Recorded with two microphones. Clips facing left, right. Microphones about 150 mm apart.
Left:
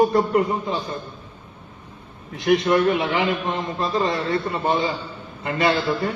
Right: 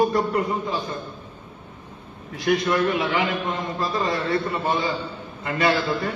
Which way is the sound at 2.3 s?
25° left (ahead or behind).